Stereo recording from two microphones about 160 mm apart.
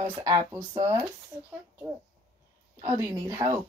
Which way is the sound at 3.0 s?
20° right (ahead or behind).